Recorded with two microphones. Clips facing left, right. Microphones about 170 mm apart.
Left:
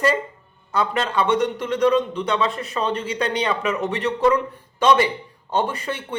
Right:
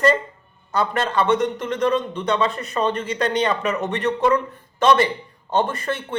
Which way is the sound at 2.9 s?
50° right (ahead or behind).